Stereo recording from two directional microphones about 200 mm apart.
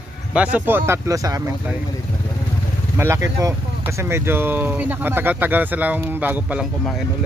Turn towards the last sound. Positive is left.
turn(degrees=-5)  # may be behind; listen again after turning